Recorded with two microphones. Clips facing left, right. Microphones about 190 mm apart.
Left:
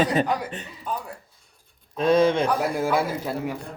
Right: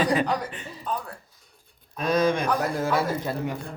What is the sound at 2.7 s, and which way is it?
Speech, 10° left (ahead or behind).